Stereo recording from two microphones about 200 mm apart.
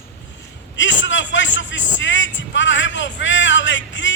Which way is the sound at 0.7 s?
65° left (ahead or behind).